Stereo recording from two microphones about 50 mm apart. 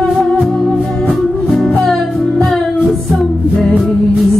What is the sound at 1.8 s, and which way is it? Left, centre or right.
Music, centre.